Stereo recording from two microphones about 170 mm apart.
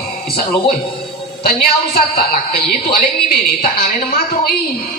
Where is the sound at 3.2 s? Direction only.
65° left (ahead or behind).